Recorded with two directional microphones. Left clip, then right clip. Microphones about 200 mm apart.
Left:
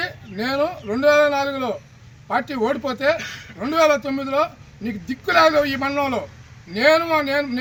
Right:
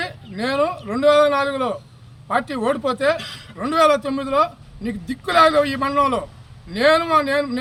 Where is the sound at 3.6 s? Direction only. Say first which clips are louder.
Right 1 dB; 5° right (ahead or behind).